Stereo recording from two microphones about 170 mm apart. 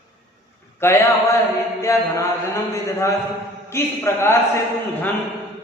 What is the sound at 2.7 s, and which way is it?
A man's voice, 20° left (ahead or behind).